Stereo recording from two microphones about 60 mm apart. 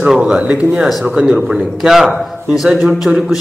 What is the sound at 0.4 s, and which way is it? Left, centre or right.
A man's voice, centre.